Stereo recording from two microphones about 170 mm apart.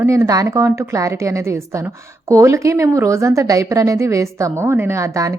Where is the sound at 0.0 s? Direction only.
15° right (ahead or behind).